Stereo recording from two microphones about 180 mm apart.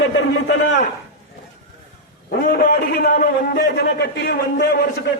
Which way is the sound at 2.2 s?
60° left (ahead or behind).